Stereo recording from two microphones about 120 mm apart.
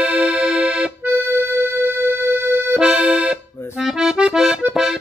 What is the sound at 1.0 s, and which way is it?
Music, 20° right (ahead or behind).